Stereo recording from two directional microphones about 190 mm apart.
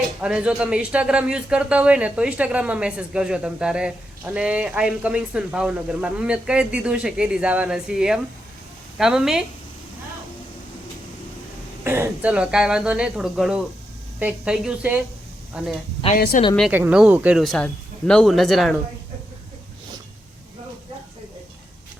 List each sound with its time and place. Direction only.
0.2 s a man's voice: 5° right (ahead or behind)
11.8 s a man's voice: 10° right (ahead or behind)